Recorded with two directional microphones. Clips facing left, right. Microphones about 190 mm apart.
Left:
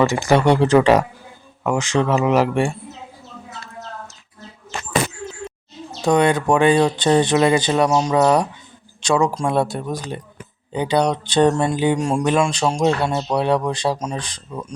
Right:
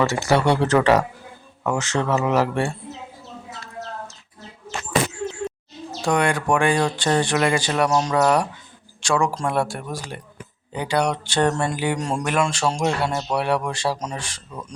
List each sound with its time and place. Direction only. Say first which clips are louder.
0.3 s speech: left 4 dB; 15° left (ahead or behind)
6.0 s speech: left 5 dB; 20° left (ahead or behind)